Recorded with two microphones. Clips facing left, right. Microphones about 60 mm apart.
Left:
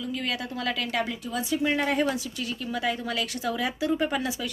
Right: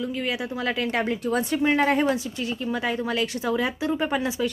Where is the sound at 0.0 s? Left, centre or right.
Right.